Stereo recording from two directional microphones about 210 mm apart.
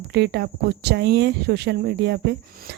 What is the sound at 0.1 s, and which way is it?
Speech, 50° right (ahead or behind).